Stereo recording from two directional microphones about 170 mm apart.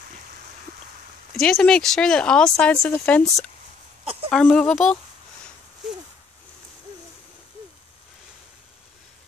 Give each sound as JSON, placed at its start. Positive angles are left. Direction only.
{"t": 1.3, "sound": "speech", "side_deg": 5}
{"t": 4.0, "sound": "a sound", "side_deg": -35}
{"t": 4.3, "sound": "speech", "side_deg": 5}